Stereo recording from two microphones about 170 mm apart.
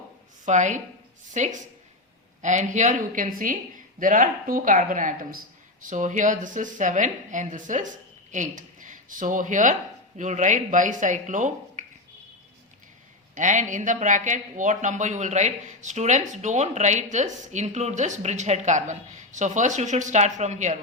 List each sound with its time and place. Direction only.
0.4 s speech: 45° right (ahead or behind)
13.3 s speech: 45° right (ahead or behind)